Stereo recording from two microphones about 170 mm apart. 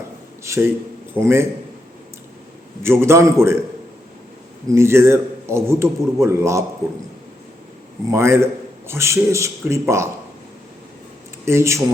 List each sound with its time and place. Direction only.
0.4 s a man's voice: 15° right (ahead or behind)
2.8 s a man's voice: 15° right (ahead or behind)
4.7 s a man's voice: 15° right (ahead or behind)
8.1 s a man's voice: 15° right (ahead or behind)
11.4 s a man's voice: 15° right (ahead or behind)